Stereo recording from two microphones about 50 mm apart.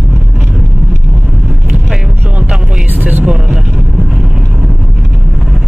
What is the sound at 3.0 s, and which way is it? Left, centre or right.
Vehicle, right.